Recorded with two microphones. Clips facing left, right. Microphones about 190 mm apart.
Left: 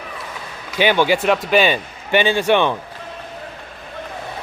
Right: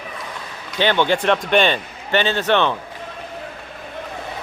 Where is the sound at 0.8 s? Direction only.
10° left (ahead or behind).